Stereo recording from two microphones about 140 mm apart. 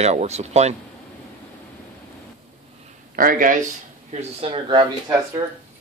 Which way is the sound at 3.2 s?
85° right.